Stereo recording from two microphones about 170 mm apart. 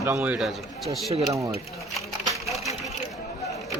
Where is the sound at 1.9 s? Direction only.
Centre (ahead or behind).